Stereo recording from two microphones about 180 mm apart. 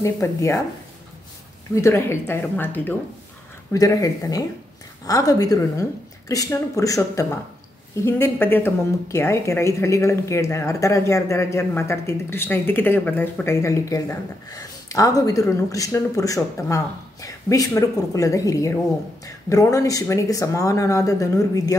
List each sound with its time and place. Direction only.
0.0 s speech: 15° left (ahead or behind)
1.8 s speech: 15° left (ahead or behind)